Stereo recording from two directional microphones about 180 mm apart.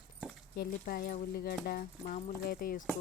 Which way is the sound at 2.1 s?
45° left (ahead or behind).